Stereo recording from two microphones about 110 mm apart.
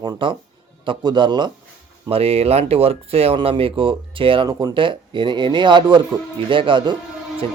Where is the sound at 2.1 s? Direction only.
65° right (ahead or behind).